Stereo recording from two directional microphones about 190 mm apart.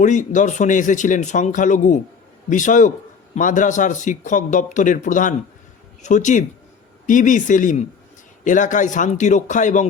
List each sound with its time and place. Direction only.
0.0 s a man's voice: 40° left (ahead or behind)